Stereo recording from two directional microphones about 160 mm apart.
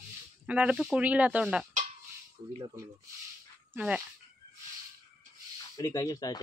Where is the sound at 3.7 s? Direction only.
5° right (ahead or behind).